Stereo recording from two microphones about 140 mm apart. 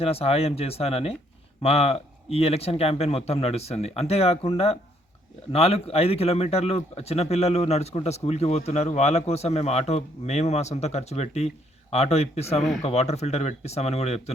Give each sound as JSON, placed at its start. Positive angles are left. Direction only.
{"t": 0.0, "sound": "speech", "side_deg": 45}